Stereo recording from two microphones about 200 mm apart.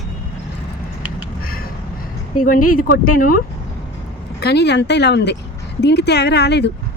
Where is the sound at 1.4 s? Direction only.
45° left (ahead or behind).